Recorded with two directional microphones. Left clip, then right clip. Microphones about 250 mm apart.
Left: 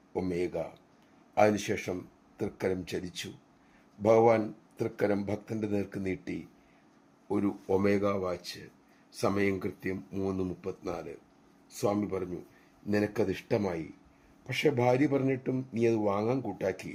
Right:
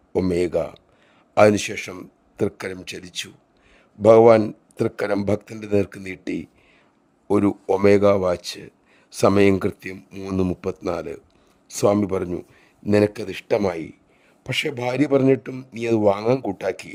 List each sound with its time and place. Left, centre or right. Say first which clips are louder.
0.1 s speech: right 12 dB; right